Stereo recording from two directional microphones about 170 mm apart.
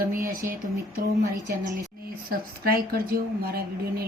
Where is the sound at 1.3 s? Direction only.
20° right (ahead or behind).